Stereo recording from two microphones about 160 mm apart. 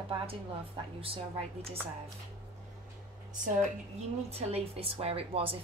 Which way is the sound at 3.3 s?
55° right (ahead or behind).